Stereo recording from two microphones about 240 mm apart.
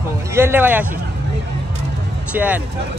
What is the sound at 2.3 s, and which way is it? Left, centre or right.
Speech, centre.